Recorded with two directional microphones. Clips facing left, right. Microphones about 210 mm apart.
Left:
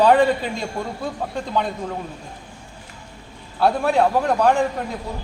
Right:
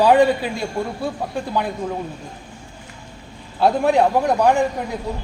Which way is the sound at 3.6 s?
15° right (ahead or behind).